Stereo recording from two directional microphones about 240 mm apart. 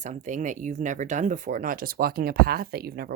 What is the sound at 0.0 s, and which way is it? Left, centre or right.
Speech, right.